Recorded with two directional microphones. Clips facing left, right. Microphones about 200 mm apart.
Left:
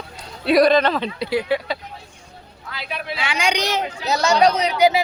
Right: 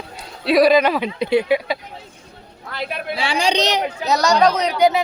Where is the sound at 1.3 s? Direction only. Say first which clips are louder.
Right 5 dB; 20° right (ahead or behind).